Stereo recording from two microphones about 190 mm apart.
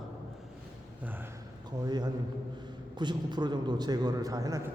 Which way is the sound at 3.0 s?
25° right (ahead or behind).